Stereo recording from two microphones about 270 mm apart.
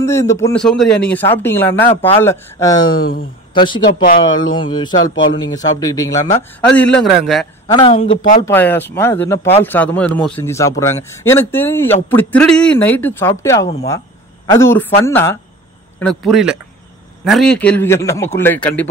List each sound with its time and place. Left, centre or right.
0.0 s a man's voice: centre
7.6 s a man's voice: centre